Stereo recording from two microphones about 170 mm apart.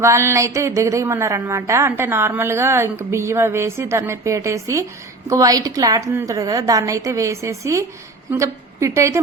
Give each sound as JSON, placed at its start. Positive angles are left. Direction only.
{"t": 0.0, "sound": "a woman's voice", "side_deg": -15}